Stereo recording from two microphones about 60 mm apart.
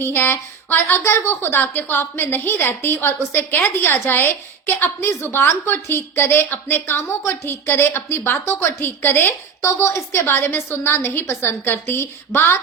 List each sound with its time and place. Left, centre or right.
0.0 s a woman's voice: left
9.6 s a woman's voice: left